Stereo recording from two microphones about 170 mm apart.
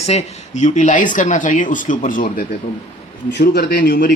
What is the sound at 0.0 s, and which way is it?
A man's voice, 40° left (ahead or behind).